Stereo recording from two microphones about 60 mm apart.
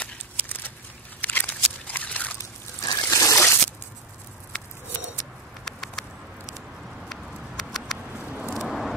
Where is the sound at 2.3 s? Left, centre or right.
Left.